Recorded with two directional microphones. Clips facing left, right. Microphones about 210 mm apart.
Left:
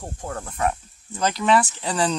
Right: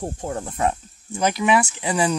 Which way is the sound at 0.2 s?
20° right (ahead or behind).